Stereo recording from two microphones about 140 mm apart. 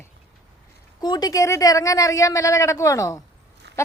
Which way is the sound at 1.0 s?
30° left (ahead or behind).